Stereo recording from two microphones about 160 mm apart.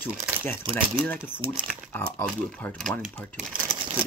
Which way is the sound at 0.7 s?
10° left (ahead or behind).